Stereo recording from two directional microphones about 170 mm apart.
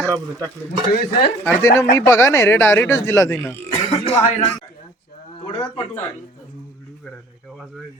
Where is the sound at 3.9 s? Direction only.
35° left (ahead or behind).